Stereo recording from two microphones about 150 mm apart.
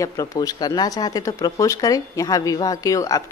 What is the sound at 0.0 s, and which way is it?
Speech, 20° left (ahead or behind).